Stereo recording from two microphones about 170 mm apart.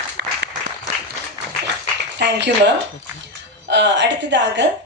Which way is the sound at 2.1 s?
90° right.